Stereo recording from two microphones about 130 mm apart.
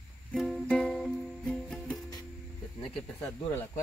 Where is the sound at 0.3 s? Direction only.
Centre (ahead or behind).